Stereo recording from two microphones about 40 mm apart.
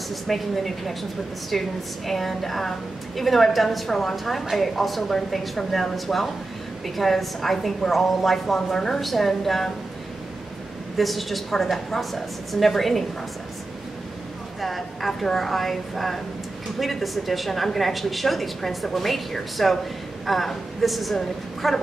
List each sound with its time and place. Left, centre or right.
0.1 s a woman's voice: centre
9.0 s a woman's voice: centre
11.0 s a woman's voice: centre
14.6 s a woman's voice: centre